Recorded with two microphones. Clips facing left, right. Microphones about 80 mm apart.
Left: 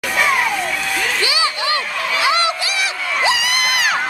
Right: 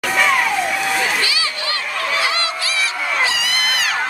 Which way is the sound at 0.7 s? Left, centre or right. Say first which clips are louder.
Right 2 dB; centre.